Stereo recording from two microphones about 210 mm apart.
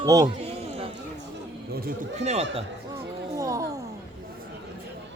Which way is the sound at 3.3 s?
15° right (ahead or behind).